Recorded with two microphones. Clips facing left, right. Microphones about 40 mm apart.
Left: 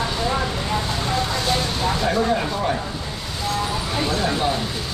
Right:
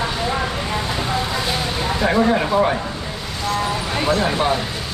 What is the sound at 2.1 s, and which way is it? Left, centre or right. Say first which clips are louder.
Speech: right 7 dB; right.